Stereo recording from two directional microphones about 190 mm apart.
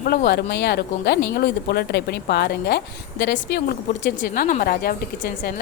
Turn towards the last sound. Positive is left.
turn(degrees=50)  # may be behind; listen again after turning